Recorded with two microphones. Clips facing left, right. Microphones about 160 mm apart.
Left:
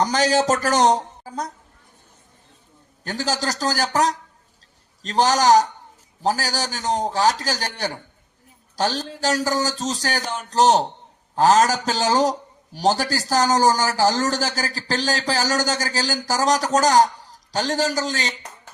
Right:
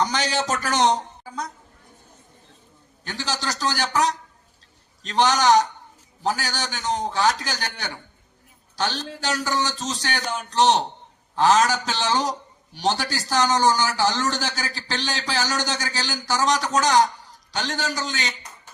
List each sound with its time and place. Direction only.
0.0 s a man's voice: 40° left (ahead or behind)
3.0 s a man's voice: 40° left (ahead or behind)